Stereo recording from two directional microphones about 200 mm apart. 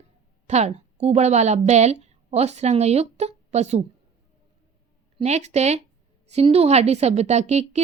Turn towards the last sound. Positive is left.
turn(degrees=-35)  # may be behind; listen again after turning